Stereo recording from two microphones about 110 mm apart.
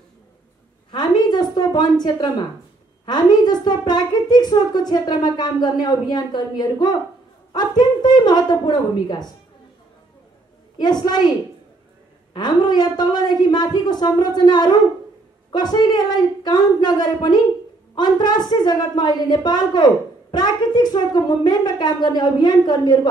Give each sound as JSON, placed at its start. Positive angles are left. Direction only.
{"t": 0.9, "sound": "a sound", "side_deg": 40}
{"t": 3.1, "sound": "a woman's voice", "side_deg": 40}
{"t": 10.8, "sound": "a woman's voice", "side_deg": 40}
{"t": 12.4, "sound": "a woman's voice", "side_deg": 40}